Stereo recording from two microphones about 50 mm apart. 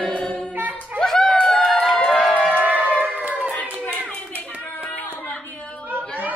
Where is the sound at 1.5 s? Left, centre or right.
Centre.